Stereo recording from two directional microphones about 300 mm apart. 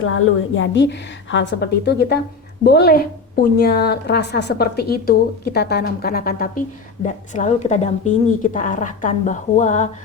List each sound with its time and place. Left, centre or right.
0.0 s a woman's voice: left